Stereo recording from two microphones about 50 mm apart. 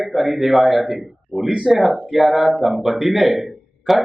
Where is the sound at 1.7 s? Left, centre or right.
Centre.